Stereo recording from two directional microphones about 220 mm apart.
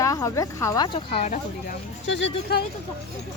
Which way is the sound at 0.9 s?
30° left (ahead or behind).